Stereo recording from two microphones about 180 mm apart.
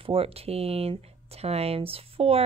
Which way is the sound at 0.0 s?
30° right (ahead or behind).